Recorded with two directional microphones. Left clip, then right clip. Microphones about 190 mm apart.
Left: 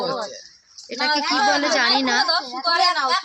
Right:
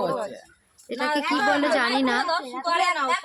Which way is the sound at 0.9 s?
15° right (ahead or behind).